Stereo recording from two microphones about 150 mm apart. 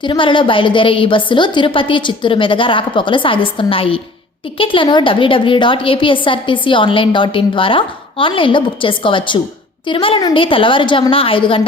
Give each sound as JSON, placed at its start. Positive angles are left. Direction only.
{"t": 0.0, "sound": "a woman's voice", "side_deg": 35}